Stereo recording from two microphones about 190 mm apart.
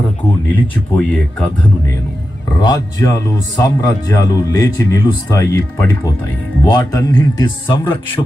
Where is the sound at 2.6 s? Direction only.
20° left (ahead or behind).